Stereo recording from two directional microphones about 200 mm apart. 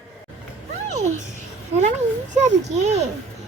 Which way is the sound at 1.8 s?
35° right (ahead or behind).